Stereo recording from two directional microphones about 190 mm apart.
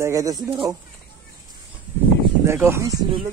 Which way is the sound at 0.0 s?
15° right (ahead or behind).